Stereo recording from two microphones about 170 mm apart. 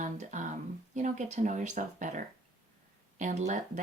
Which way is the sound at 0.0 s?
45° right (ahead or behind).